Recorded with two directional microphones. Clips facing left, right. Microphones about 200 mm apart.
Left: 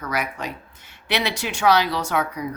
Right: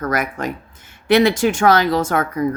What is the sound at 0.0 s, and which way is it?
Speech, 50° right (ahead or behind).